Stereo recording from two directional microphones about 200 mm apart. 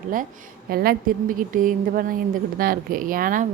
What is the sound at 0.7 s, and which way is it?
A woman's voice, 50° right (ahead or behind).